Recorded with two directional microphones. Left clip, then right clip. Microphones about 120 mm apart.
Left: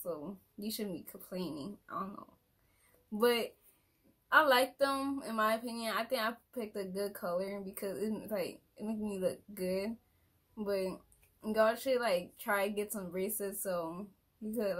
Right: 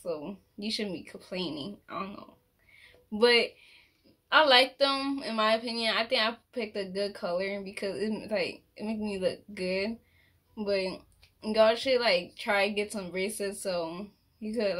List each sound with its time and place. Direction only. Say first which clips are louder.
0.0 s speech: right 6 dB; centre (ahead or behind)